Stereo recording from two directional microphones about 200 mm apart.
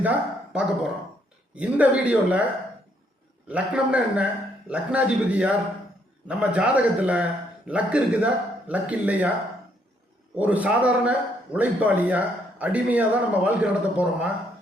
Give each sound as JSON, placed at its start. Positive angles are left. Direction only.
{"t": 0.0, "sound": "a man's voice", "side_deg": -5}
{"t": 3.5, "sound": "a man's voice", "side_deg": -5}
{"t": 10.3, "sound": "a man's voice", "side_deg": -5}